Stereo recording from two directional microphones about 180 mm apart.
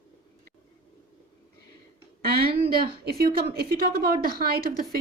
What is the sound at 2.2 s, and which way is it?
Speech, 60° right (ahead or behind).